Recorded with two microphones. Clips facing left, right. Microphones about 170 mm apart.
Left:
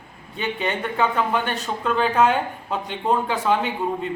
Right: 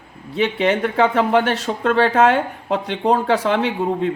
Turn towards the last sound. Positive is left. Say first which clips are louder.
# right 5 dB
turn(degrees=-90)